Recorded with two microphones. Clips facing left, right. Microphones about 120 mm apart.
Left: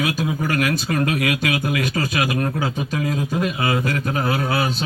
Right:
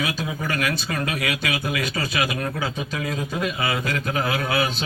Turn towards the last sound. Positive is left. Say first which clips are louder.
# left 3 dB
turn(degrees=45)  # may be behind; listen again after turning